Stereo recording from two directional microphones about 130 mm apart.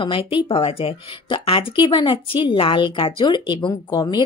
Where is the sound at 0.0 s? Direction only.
40° left (ahead or behind).